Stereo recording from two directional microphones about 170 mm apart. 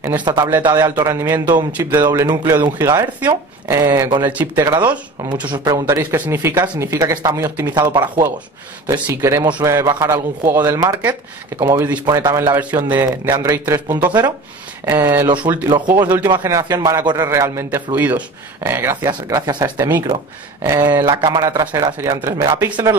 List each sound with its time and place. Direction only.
0.2 s a man's voice: 25° right (ahead or behind)
2.0 s a man's voice: 25° right (ahead or behind)
5.5 s a man's voice: 25° right (ahead or behind)
12.4 s a man's voice: 10° right (ahead or behind)
15.2 s speech: 25° right (ahead or behind)
16.0 s a man's voice: 10° right (ahead or behind)
16.3 s a man's voice: 20° right (ahead or behind)